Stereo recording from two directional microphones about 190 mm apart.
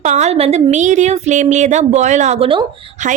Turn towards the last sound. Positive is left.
turn(degrees=-40)  # may be behind; listen again after turning